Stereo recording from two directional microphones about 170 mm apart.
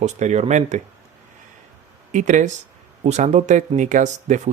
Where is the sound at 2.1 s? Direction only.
45° right (ahead or behind).